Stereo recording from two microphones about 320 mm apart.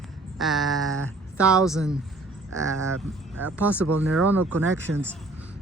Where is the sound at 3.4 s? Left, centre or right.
Centre.